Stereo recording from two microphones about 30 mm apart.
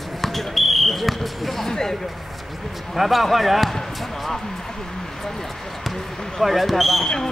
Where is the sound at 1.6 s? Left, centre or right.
Centre.